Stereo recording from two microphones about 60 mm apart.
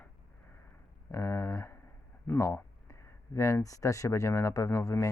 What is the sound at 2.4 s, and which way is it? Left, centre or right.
Speech, left.